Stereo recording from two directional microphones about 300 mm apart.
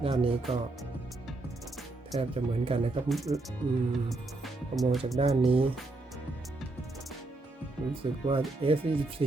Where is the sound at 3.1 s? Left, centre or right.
Centre.